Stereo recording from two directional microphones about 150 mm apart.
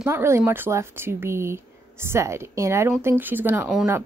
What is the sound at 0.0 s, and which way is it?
A woman's voice, 20° right (ahead or behind).